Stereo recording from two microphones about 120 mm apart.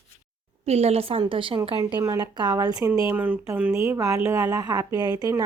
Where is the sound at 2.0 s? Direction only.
30° right (ahead or behind).